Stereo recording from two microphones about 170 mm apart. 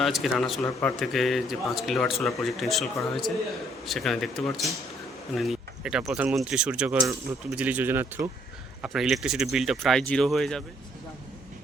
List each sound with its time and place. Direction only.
0.0 s speech: centre (ahead or behind)
8.8 s speech: centre (ahead or behind)